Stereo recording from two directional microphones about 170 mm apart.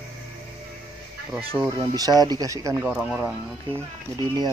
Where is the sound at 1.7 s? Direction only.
20° right (ahead or behind).